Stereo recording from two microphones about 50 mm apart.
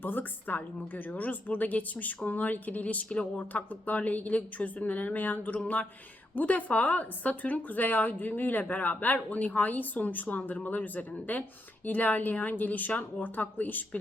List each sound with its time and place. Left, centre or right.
0.0 s a woman's voice: left